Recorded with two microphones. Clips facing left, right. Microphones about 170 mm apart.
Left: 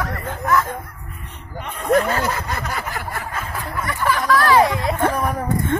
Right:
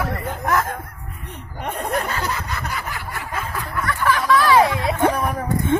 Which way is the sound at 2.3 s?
50° left (ahead or behind).